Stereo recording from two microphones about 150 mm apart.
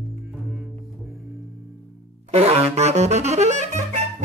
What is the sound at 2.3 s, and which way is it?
Saxophone, 45° right (ahead or behind).